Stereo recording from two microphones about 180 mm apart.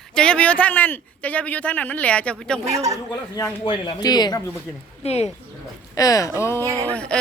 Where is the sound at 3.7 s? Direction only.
25° left (ahead or behind).